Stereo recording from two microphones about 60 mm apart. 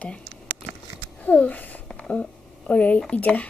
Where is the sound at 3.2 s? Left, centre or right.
Left.